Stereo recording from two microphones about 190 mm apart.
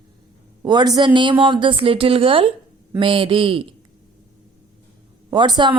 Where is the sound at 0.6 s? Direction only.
20° right (ahead or behind).